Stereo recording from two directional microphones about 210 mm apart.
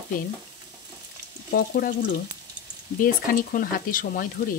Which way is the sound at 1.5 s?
45° left (ahead or behind).